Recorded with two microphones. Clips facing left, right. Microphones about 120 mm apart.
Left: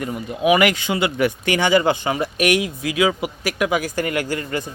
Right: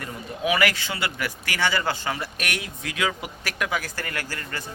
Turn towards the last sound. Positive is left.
turn(degrees=15)  # may be behind; listen again after turning